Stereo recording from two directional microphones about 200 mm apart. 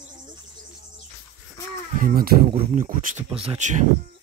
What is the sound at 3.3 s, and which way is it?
Speech, 30° right (ahead or behind).